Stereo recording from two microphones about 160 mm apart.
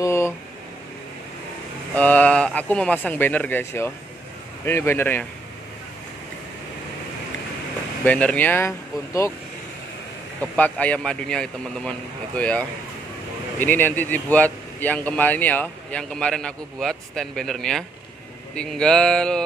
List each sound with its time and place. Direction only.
0.0 s a sound: 15° left (ahead or behind)
2.0 s speech: 10° left (ahead or behind)
8.0 s speech: 10° left (ahead or behind)
10.4 s speech: 10° left (ahead or behind)